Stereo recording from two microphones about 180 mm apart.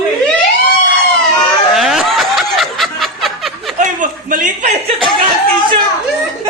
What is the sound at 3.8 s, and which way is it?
Chuckle, 50° right (ahead or behind).